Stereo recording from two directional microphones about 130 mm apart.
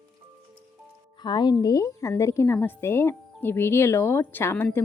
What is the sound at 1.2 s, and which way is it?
A woman's voice, 35° left (ahead or behind).